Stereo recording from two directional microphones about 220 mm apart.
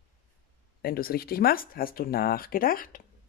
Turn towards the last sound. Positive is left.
turn(degrees=40)  # may be behind; listen again after turning